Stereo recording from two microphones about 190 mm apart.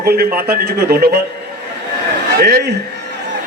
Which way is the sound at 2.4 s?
50° right (ahead or behind).